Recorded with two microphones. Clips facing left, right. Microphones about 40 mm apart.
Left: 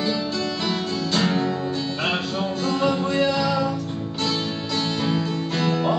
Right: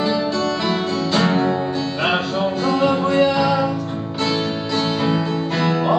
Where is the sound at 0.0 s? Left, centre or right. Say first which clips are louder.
Right 5 dB; centre.